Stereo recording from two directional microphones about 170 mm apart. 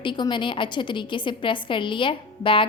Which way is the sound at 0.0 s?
30° left (ahead or behind).